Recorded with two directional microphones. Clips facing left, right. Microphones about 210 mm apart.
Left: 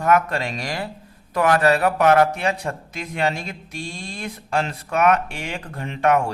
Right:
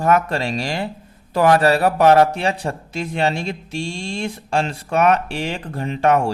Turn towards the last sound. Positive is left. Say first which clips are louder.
# right 2 dB
turn(degrees=-30)  # may be behind; listen again after turning